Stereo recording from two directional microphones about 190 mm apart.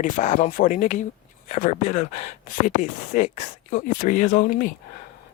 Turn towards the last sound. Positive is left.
turn(degrees=45)  # may be behind; listen again after turning